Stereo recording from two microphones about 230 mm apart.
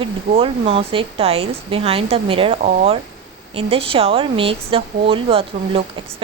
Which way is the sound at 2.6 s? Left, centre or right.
Right.